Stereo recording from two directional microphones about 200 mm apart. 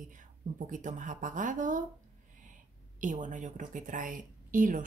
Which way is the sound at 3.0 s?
40° right (ahead or behind).